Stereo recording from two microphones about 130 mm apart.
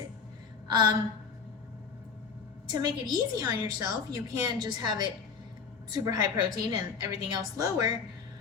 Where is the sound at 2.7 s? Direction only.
30° right (ahead or behind).